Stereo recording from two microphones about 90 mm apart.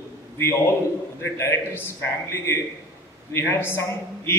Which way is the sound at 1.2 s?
30° left (ahead or behind).